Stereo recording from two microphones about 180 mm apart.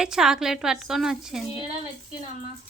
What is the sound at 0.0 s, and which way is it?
A woman's voice, 5° right (ahead or behind).